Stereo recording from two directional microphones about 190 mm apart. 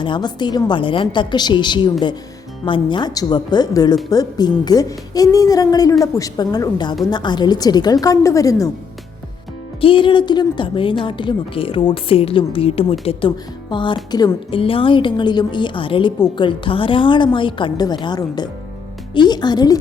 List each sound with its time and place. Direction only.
0.0 s a woman's voice: 25° left (ahead or behind)
9.8 s a woman's voice: 25° left (ahead or behind)